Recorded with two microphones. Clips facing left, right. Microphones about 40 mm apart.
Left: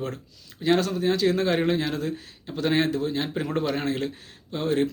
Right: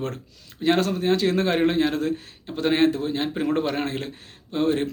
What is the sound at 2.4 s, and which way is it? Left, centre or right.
Speech, right.